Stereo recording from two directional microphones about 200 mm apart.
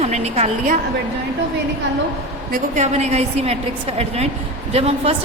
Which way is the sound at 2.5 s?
35° right (ahead or behind).